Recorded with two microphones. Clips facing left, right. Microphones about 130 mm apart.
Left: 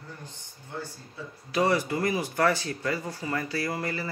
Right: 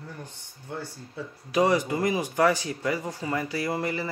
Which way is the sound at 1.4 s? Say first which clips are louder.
Right 2 dB; 15° right (ahead or behind).